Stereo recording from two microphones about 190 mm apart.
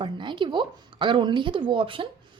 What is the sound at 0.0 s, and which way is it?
A woman's voice, 25° right (ahead or behind).